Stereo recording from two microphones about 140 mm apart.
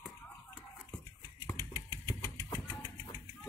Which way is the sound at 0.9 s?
20° left (ahead or behind).